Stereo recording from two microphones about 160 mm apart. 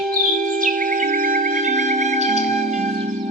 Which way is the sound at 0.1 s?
55° right (ahead or behind).